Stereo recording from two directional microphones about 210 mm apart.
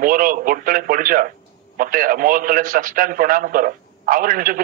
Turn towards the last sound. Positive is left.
turn(degrees=-40)  # may be behind; listen again after turning